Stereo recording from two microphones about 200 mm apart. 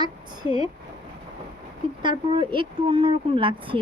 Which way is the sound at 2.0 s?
25° right (ahead or behind).